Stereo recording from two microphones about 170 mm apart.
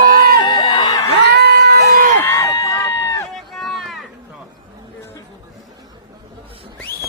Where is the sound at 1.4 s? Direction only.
80° right.